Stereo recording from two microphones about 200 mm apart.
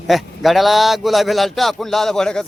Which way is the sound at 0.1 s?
Centre (ahead or behind).